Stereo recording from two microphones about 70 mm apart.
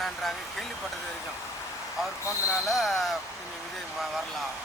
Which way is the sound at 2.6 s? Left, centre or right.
Centre.